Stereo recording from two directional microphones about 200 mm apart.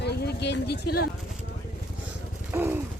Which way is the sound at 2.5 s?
10° right (ahead or behind).